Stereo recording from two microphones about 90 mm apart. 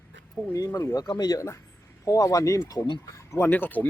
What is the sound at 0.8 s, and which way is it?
Speech, 40° left (ahead or behind).